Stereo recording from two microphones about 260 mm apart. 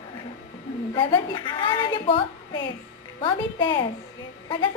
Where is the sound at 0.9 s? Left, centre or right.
Centre.